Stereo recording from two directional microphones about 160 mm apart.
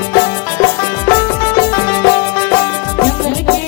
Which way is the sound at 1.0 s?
15° left (ahead or behind).